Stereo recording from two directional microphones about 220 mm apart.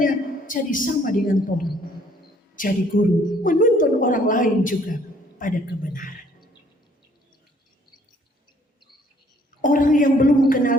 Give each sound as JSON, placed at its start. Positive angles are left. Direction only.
{"t": 0.0, "sound": "a woman's voice", "side_deg": 40}
{"t": 9.6, "sound": "a woman's voice", "side_deg": 40}